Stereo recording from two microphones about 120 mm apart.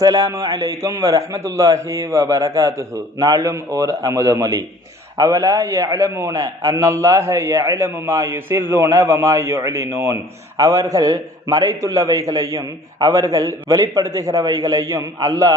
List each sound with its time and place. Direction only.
0.0 s a man's voice: 30° right (ahead or behind)